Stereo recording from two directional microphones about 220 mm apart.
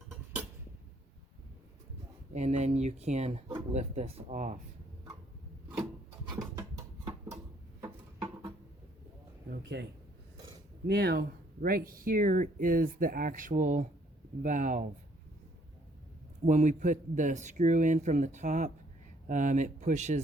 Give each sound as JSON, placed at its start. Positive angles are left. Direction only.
{"t": 2.3, "sound": "speech", "side_deg": -30}
{"t": 6.6, "sound": "music", "side_deg": -15}
{"t": 8.2, "sound": "a sound", "side_deg": -15}
{"t": 9.5, "sound": "speech", "side_deg": -50}
{"t": 10.8, "sound": "speech", "side_deg": -45}
{"t": 16.5, "sound": "speech", "side_deg": -35}